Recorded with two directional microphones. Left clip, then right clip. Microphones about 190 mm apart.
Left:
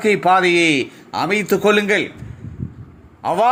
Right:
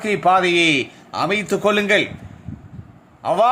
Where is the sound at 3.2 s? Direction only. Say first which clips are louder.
Even; 10° left (ahead or behind).